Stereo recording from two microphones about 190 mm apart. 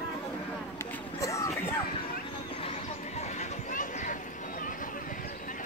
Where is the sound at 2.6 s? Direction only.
30° left (ahead or behind).